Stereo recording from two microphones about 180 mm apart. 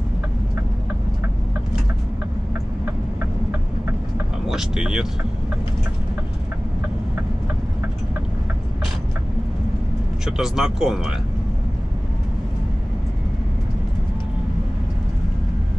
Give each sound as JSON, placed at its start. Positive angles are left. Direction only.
{"t": 4.5, "sound": "vehicle", "side_deg": -5}
{"t": 10.2, "sound": "speech", "side_deg": -5}